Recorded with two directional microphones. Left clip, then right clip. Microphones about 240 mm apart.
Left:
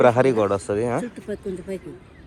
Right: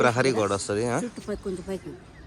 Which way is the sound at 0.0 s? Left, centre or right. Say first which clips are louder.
Left 5 dB; centre.